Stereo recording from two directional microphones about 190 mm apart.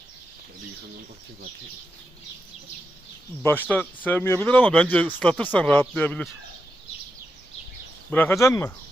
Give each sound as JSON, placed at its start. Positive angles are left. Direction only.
{"t": 3.4, "sound": "speech", "side_deg": 10}
{"t": 8.1, "sound": "speech", "side_deg": 10}